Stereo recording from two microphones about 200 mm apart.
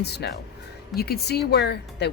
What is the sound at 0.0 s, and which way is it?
Speech, 55° left (ahead or behind).